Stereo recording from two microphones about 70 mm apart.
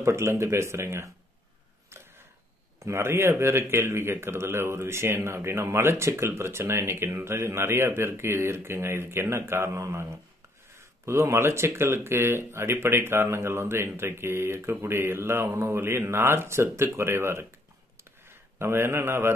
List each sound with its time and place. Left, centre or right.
0.0 s speech: right
2.8 s speech: right
17.9 s a sound: right